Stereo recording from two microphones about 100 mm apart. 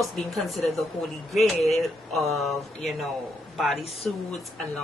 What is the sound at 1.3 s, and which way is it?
Speech, centre (ahead or behind).